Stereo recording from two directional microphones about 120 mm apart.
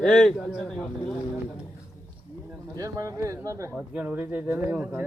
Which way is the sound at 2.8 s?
25° right (ahead or behind).